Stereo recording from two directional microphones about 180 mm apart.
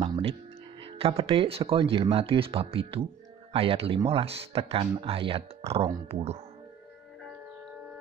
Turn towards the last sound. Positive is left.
turn(degrees=-35)  # may be behind; listen again after turning